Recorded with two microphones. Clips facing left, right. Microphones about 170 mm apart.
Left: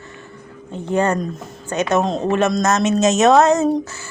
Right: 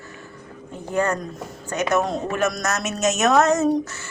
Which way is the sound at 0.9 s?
25° left (ahead or behind).